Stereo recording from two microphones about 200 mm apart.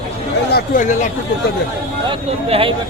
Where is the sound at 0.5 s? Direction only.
40° left (ahead or behind).